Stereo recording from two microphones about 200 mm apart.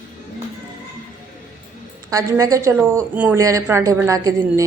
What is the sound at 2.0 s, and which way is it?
Speech, 15° right (ahead or behind).